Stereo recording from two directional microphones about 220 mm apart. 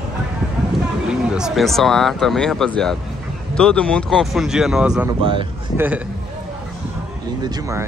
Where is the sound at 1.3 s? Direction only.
Centre (ahead or behind).